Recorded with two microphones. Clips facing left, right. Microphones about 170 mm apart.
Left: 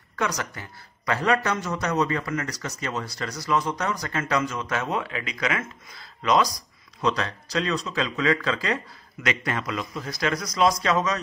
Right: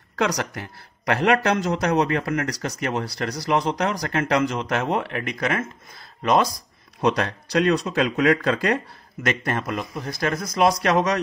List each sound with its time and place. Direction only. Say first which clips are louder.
0.4 s a man's voice: right 5 dB; 70° right (ahead or behind); by 10.7 s 55° right (ahead or behind)
10.8 s a man's voice: right 4 dB; 65° right (ahead or behind)